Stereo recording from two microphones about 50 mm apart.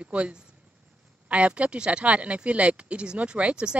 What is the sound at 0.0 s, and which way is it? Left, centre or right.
A woman's voice, right.